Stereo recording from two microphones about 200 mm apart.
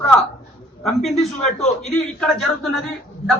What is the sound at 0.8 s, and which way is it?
A man's voice, centre (ahead or behind).